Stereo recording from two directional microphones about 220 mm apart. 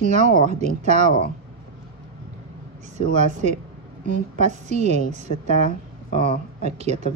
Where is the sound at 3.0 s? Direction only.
30° right (ahead or behind).